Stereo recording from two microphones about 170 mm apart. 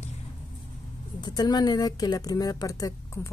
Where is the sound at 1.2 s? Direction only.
25° left (ahead or behind).